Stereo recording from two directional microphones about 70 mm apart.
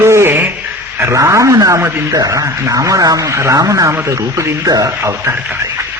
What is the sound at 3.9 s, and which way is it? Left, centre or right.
A man's voice, right.